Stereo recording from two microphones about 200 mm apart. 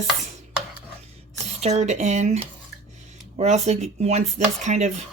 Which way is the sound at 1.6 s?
35° right (ahead or behind).